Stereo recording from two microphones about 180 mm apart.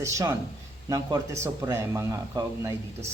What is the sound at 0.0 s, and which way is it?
Speech, 15° right (ahead or behind).